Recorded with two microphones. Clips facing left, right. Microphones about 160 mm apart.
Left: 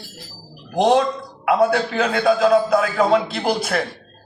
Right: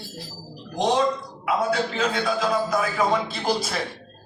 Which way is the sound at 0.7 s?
70° left (ahead or behind).